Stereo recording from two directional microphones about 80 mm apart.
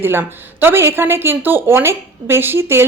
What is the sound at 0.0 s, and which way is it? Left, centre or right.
A woman's voice, right.